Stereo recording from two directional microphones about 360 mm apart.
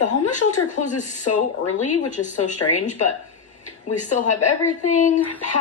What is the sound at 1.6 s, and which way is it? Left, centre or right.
A woman's voice, left.